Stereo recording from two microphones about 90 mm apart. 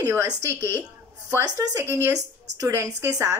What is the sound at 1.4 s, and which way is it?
Speech, 45° right (ahead or behind).